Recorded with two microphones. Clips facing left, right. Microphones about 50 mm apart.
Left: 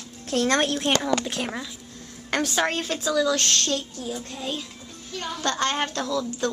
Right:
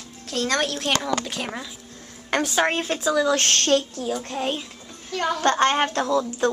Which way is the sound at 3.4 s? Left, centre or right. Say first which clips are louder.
Right 5 dB; right.